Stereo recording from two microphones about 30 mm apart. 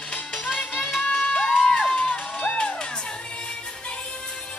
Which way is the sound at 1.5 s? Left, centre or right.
Left.